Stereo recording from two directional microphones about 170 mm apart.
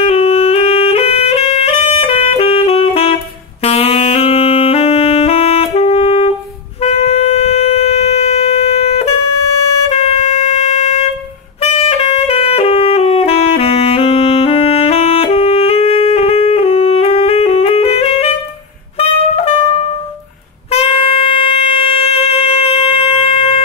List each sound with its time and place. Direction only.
0.0 s music: 35° left (ahead or behind)
3.6 s saxophone: 35° left (ahead or behind)
6.8 s shofar: 35° left (ahead or behind)
9.8 s a sound: 40° left (ahead or behind)
11.6 s saxophone: 40° left (ahead or behind)
18.9 s brass instrument: 35° left (ahead or behind)
20.7 s music: 35° left (ahead or behind)